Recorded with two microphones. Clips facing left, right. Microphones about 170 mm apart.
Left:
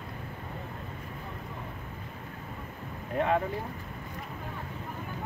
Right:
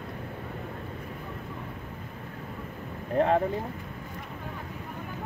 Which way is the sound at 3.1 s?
35° right (ahead or behind).